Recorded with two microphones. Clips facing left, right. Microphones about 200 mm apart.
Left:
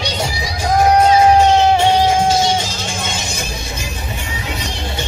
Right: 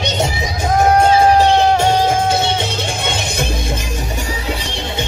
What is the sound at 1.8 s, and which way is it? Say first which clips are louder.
Music: left 1 dB; 60° right (ahead or behind).